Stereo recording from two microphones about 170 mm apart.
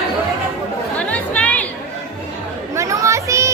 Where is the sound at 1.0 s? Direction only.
10° left (ahead or behind).